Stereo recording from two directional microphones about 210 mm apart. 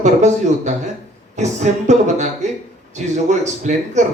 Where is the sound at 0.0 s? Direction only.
35° right (ahead or behind).